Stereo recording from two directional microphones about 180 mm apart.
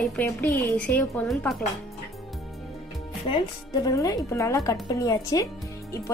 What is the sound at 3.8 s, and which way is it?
A woman's voice, 20° left (ahead or behind).